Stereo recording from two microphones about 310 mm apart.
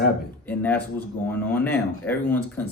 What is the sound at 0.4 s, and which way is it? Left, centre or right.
Speech, centre.